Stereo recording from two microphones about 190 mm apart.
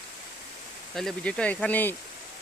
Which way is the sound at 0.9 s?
Centre (ahead or behind).